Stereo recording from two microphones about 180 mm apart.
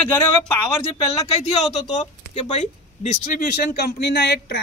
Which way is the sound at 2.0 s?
40° left (ahead or behind).